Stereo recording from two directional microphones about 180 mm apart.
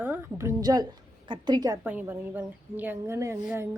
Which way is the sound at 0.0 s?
10° right (ahead or behind).